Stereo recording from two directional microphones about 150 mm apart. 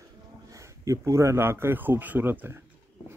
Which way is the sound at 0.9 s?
20° right (ahead or behind).